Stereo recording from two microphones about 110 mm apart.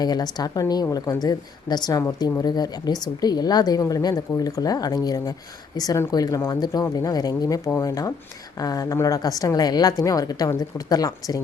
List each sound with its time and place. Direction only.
0.0 s a woman's voice: 40° left (ahead or behind)